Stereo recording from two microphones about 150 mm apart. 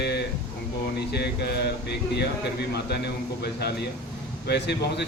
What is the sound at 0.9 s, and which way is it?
Speech, 90° left.